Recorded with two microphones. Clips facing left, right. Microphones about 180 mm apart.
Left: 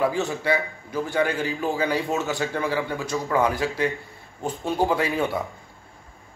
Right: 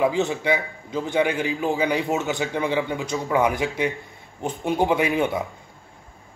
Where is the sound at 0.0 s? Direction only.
20° right (ahead or behind).